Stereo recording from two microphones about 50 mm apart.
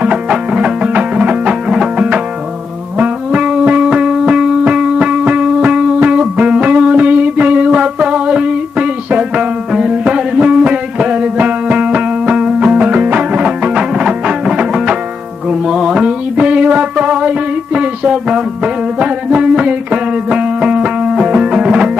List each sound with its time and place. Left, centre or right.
0.0 s music: centre
3.9 s music: centre
15.5 s mantra: centre
21.3 s music: centre